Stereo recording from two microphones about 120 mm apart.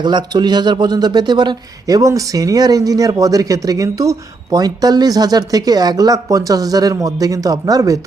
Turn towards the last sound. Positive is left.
turn(degrees=-30)  # may be behind; listen again after turning